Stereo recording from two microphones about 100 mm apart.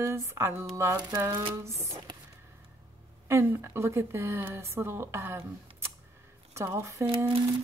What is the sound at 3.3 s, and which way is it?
A woman's voice, 25° right (ahead or behind).